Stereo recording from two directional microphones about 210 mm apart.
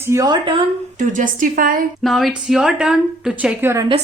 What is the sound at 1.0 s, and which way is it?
Speech, 40° right (ahead or behind).